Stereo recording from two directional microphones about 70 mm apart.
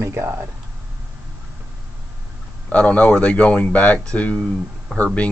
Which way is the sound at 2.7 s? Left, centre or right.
Centre.